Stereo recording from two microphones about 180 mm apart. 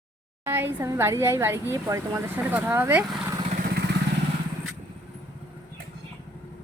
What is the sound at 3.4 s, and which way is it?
Vehicle, 55° right (ahead or behind).